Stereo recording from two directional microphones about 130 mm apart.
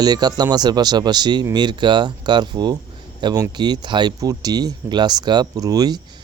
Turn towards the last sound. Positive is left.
turn(degrees=-30)  # may be behind; listen again after turning